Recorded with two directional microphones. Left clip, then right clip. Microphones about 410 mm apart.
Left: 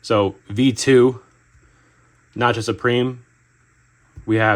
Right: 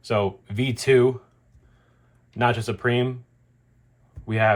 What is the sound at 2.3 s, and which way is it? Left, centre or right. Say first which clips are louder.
Speech: left 4 dB; left.